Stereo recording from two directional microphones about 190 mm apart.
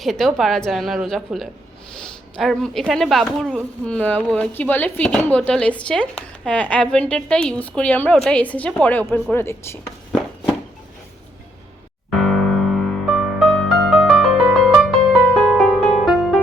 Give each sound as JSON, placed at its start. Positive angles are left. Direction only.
{"t": 0.0, "sound": "a woman's voice", "side_deg": 0}
{"t": 10.1, "sound": "walk", "side_deg": 0}
{"t": 12.1, "sound": "music", "side_deg": 0}